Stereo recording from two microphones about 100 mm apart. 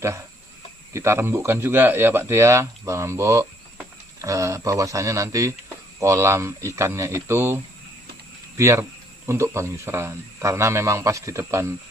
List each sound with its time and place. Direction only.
0.9 s speech: 25° right (ahead or behind)